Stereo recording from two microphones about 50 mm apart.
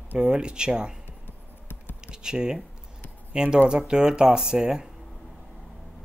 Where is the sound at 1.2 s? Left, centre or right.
Left.